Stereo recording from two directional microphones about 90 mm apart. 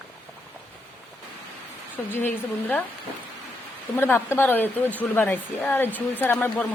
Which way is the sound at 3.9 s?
25° left (ahead or behind).